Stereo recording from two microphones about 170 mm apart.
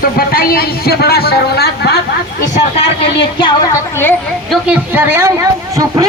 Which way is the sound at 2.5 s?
35° left (ahead or behind).